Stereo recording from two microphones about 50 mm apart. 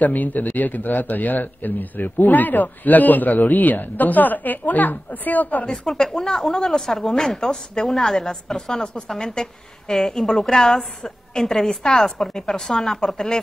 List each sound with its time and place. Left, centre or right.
0.0 s a man's voice: left
5.7 s speech: centre